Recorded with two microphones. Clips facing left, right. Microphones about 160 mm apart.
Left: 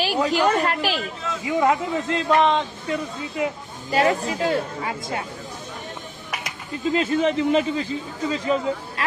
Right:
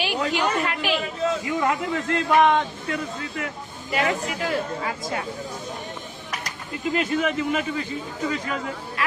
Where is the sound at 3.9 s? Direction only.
30° left (ahead or behind).